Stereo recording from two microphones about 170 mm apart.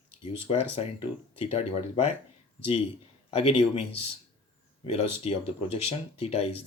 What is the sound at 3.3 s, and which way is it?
Speech, 35° left (ahead or behind).